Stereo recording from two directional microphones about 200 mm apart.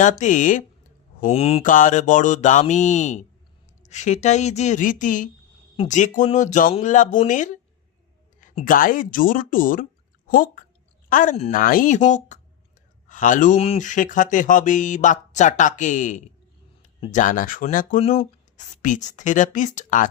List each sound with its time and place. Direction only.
0.0 s speech: 40° left (ahead or behind)